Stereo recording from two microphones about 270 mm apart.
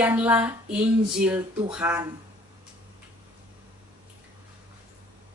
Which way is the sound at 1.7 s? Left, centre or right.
Centre.